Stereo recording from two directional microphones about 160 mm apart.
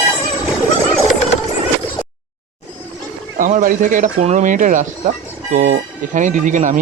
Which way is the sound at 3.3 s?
55° right (ahead or behind).